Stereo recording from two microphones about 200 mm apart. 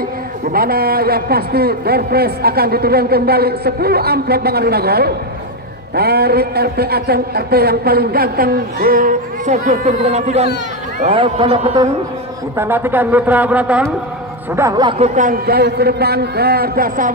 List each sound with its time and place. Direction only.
0.5 s a man's voice: 50° right (ahead or behind); by 11.9 s 25° right (ahead or behind)
12.5 s speech: 10° right (ahead or behind)
15.1 s a man's voice: 45° right (ahead or behind)